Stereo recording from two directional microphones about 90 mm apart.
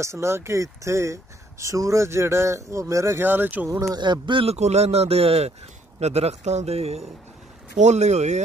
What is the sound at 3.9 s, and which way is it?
Speech, 60° right (ahead or behind).